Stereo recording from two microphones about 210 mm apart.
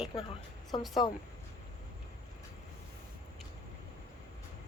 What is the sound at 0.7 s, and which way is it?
Speech, 25° left (ahead or behind).